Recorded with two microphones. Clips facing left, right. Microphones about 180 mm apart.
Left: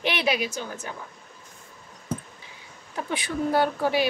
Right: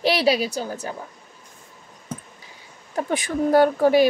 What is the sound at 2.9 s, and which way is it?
Speech, 45° right (ahead or behind).